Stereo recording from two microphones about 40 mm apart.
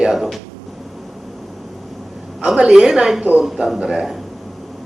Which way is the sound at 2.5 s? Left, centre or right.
Centre.